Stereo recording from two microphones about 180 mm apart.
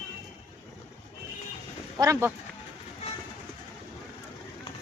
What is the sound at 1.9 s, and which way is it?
Speech, 15° right (ahead or behind).